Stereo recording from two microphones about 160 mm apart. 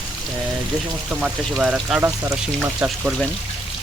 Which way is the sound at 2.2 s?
20° right (ahead or behind).